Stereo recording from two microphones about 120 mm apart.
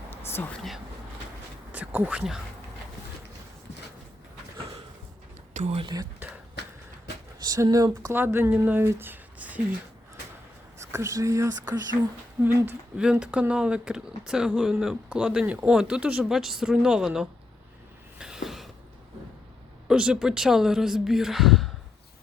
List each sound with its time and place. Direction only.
1.7 s speech: 15° right (ahead or behind)
5.5 s speech: 90° right
5.9 s speech: 30° right (ahead or behind)
7.4 s speech: 30° right (ahead or behind)
8.1 s speech: 20° right (ahead or behind)
10.8 s speech: 25° right (ahead or behind)
12.4 s speech: 20° right (ahead or behind)
13.0 s speech: 5° right (ahead or behind)
18.2 s a sound: 5° right (ahead or behind)
19.9 s speech: 5° right (ahead or behind)